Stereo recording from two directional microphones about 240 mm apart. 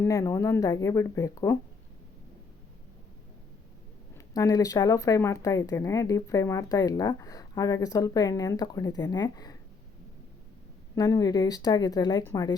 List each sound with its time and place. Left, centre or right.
0.0 s speech: centre
4.4 s speech: centre
10.9 s speech: centre